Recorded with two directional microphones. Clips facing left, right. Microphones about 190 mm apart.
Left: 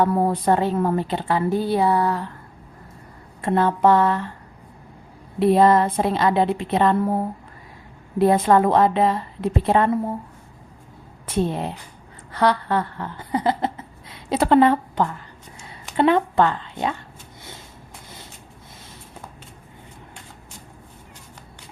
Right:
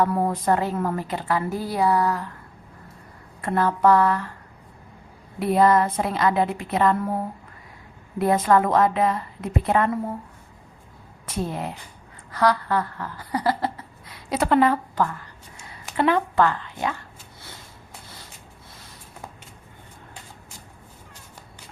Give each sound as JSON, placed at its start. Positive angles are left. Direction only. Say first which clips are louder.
{"t": 0.0, "sound": "a woman's voice", "louder": "left 3 dB", "side_deg": 30}
{"t": 3.4, "sound": "a woman's voice", "louder": "left 2 dB", "side_deg": 25}
{"t": 5.4, "sound": "a woman's voice", "louder": "left 3 dB", "side_deg": 25}
{"t": 8.2, "sound": "a woman's voice", "louder": "left 3 dB", "side_deg": 25}
{"t": 11.3, "sound": "a woman's voice", "louder": "left 5 dB", "side_deg": 25}